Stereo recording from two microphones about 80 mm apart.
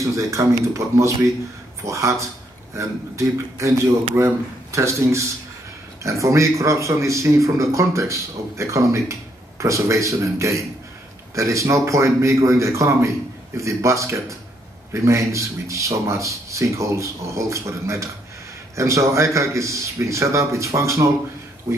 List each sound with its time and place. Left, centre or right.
0.0 s speech: right
4.7 s speech: right